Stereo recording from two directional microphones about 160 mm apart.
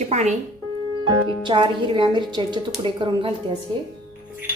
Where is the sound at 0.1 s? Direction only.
45° right (ahead or behind).